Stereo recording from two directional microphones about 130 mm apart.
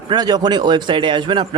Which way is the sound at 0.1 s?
30° right (ahead or behind).